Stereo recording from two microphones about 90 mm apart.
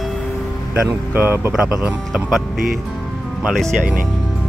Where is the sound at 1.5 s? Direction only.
5° right (ahead or behind).